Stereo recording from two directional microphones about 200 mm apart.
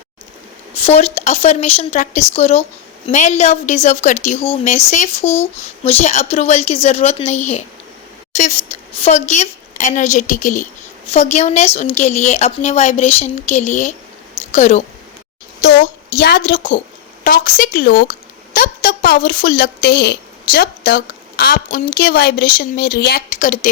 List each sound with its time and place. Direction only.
0.7 s a woman's voice: 30° left (ahead or behind)
8.3 s a sound: 35° left (ahead or behind)
9.0 s a woman's voice: 35° left (ahead or behind)
16.5 s a woman's voice: 40° left (ahead or behind)
18.1 s a sound: 45° left (ahead or behind)
21.9 s a woman's voice: 50° left (ahead or behind)
23.3 s a woman's voice: 40° left (ahead or behind)